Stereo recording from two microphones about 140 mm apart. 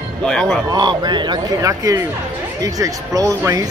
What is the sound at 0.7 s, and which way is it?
A man's voice, 30° right (ahead or behind).